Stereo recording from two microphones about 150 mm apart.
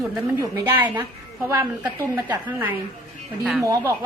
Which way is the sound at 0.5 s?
15° right (ahead or behind).